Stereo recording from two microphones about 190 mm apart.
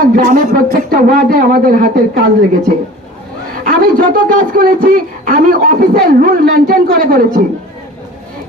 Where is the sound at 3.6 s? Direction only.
45° right (ahead or behind).